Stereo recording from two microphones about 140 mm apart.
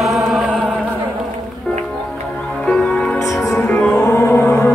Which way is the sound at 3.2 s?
20° left (ahead or behind).